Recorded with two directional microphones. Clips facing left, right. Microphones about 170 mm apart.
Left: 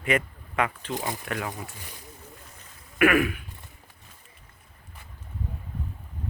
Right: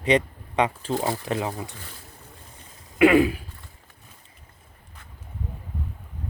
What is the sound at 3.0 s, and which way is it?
Speech, 25° right (ahead or behind).